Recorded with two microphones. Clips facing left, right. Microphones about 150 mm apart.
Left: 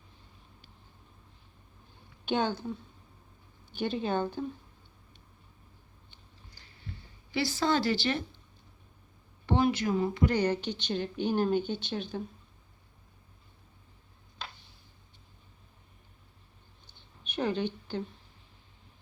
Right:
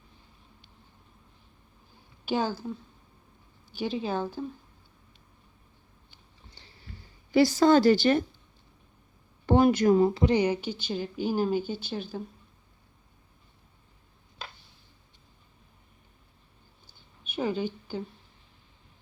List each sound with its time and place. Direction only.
2.2 s a woman's voice: 5° right (ahead or behind)
3.8 s a woman's voice: centre (ahead or behind)
6.5 s a sound: 25° right (ahead or behind)
7.3 s a woman's voice: 45° right (ahead or behind)
9.5 s a woman's voice: 45° right (ahead or behind)
10.2 s a woman's voice: 15° right (ahead or behind)
16.8 s a sound: 5° right (ahead or behind)